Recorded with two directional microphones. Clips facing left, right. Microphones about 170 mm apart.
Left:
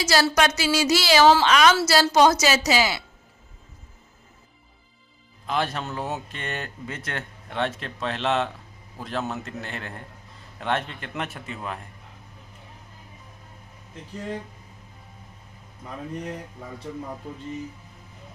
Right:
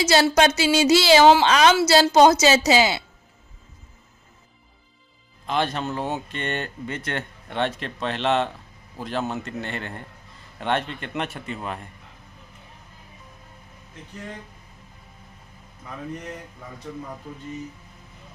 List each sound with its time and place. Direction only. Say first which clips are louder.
0.0 s a woman's voice: right 3 dB; 25° right (ahead or behind)
5.5 s speech: right 2 dB; centre (ahead or behind)